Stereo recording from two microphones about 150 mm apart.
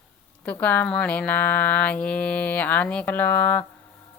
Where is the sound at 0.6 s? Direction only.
10° left (ahead or behind).